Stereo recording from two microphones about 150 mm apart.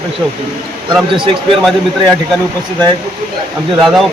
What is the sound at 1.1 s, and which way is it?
Speech, 35° right (ahead or behind).